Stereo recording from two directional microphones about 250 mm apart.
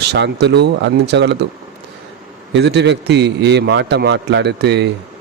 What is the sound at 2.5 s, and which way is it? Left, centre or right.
A man's voice, right.